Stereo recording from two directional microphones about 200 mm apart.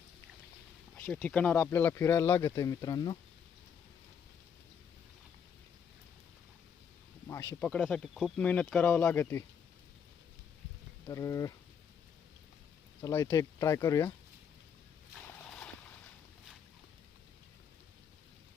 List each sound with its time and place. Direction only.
0.9 s speech: 5° left (ahead or behind)
7.6 s speech: 5° left (ahead or behind)
11.1 s speech: 15° left (ahead or behind)
13.0 s speech: 15° left (ahead or behind)